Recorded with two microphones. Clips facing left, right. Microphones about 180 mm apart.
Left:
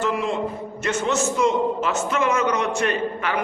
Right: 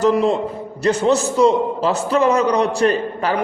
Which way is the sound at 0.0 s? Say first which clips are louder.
Right 7 dB; 35° right (ahead or behind).